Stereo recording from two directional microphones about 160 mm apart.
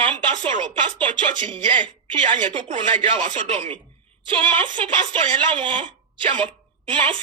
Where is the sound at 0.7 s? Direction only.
30° right (ahead or behind).